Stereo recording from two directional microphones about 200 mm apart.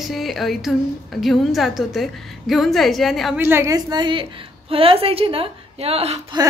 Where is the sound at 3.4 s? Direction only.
15° right (ahead or behind); by 6.4 s 30° right (ahead or behind).